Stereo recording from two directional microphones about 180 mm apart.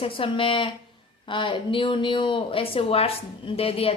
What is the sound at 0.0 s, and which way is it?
A woman's voice, 30° left (ahead or behind).